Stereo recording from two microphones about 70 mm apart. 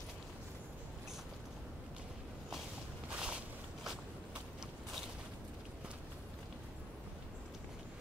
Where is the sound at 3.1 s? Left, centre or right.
Centre.